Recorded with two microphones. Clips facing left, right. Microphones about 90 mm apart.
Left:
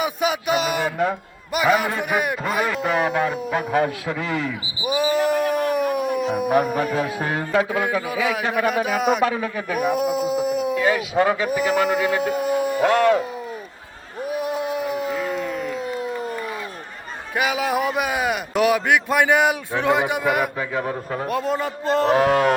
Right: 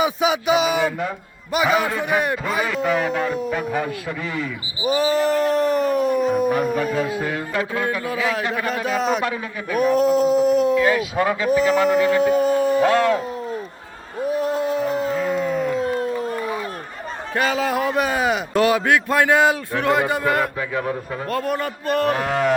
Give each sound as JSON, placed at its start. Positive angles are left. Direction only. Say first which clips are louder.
{"t": 0.0, "sound": "speech", "louder": "right 3 dB", "side_deg": 0}
{"t": 3.5, "sound": "a man's voice", "louder": "left 3 dB", "side_deg": 50}
{"t": 4.9, "sound": "a man's voice", "louder": "right 1 dB", "side_deg": 10}
{"t": 14.3, "sound": "a sound", "louder": "right 3 dB", "side_deg": 10}
{"t": 15.8, "sound": "a sound", "louder": "right 5 dB", "side_deg": -40}
{"t": 17.3, "sound": "a man's voice", "louder": "right 1 dB", "side_deg": 10}
{"t": 18.0, "sound": "a man's voice", "louder": "right 2 dB", "side_deg": 5}
{"t": 22.2, "sound": "a man's voice", "louder": "left 3 dB", "side_deg": 65}